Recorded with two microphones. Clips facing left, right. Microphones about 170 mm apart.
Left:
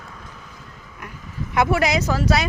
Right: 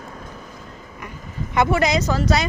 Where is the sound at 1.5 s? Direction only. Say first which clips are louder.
Right 1 dB; 5° left (ahead or behind).